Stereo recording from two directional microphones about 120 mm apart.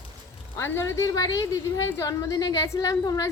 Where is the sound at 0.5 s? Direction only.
20° left (ahead or behind).